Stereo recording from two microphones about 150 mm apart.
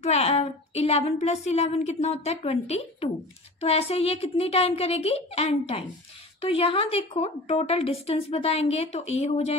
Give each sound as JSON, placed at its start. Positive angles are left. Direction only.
{"t": 0.0, "sound": "a woman's voice", "side_deg": 45}